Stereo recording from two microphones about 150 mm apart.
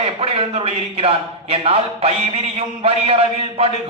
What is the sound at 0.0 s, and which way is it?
A man's voice, 40° right (ahead or behind).